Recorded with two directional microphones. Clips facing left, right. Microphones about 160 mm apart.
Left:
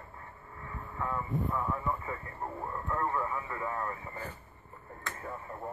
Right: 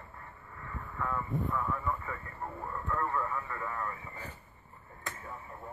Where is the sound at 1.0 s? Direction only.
25° left (ahead or behind).